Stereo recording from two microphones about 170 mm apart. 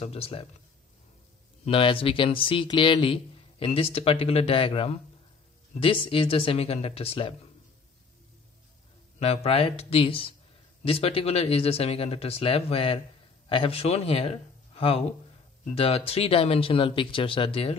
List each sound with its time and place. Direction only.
0.0 s speech: 35° left (ahead or behind)
1.6 s speech: 30° left (ahead or behind)
9.2 s speech: 35° left (ahead or behind)